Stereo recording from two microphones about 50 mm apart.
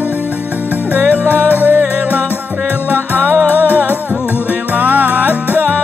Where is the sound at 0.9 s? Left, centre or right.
Right.